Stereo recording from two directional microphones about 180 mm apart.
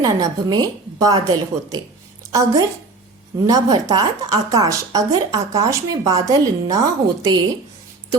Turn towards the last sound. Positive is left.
turn(degrees=-25)  # may be behind; listen again after turning